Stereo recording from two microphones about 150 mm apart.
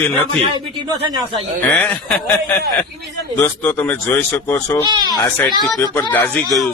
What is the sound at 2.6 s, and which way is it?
Speech, 90° right.